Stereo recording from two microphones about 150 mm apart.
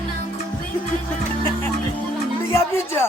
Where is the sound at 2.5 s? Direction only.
15° left (ahead or behind).